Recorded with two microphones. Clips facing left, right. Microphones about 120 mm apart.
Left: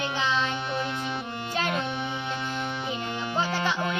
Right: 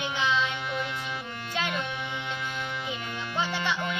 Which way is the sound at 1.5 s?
40° left (ahead or behind).